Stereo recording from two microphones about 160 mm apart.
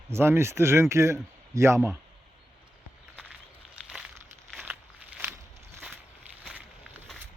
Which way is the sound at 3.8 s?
5° right (ahead or behind).